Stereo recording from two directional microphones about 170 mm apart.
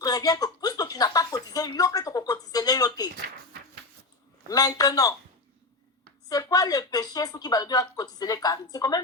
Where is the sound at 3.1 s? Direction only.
70° right (ahead or behind).